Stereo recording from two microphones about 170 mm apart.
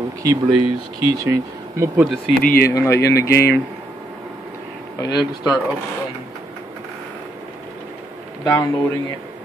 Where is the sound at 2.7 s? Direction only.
15° left (ahead or behind).